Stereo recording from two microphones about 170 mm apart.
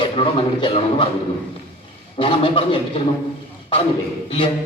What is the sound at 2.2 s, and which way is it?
Speech, 30° left (ahead or behind).